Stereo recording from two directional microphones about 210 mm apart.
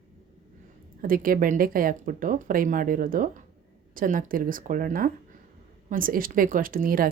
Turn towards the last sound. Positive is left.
turn(degrees=-45)  # may be behind; listen again after turning